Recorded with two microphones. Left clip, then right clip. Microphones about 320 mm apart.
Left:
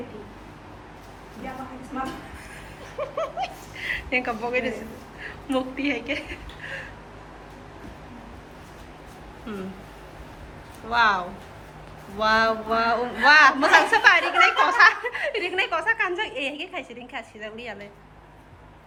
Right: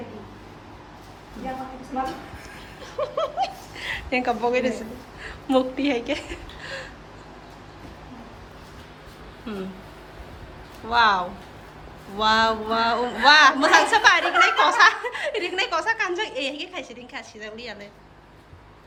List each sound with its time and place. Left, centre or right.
3.0 s a sound: centre
5.2 s a woman's voice: centre
9.5 s speech: centre
10.8 s a woman's voice: centre